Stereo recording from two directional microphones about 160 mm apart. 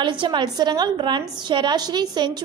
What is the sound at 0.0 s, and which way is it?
A woman's voice, 30° right (ahead or behind).